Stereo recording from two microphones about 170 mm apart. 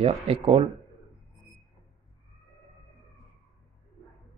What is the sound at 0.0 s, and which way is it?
Speech, 30° right (ahead or behind).